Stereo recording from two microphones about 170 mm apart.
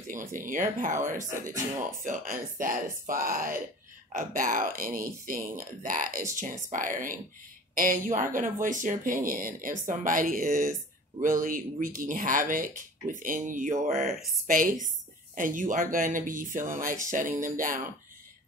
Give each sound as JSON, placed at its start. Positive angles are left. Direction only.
{"t": 0.3, "sound": "speech", "side_deg": -50}
{"t": 2.0, "sound": "speech", "side_deg": -50}